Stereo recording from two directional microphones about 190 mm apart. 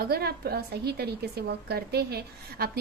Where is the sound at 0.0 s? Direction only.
55° right (ahead or behind).